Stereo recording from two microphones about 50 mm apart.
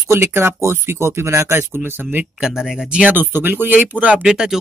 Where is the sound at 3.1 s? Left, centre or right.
Right.